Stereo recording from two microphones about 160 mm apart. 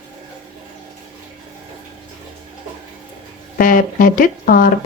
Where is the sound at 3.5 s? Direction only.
60° left (ahead or behind).